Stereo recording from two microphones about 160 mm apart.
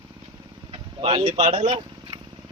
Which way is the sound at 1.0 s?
35° right (ahead or behind).